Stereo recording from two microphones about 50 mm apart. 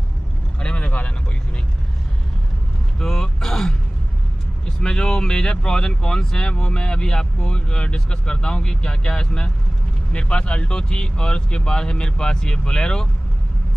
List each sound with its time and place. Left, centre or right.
0.6 s vehicle: left
3.0 s vehicle: centre
4.6 s speech: centre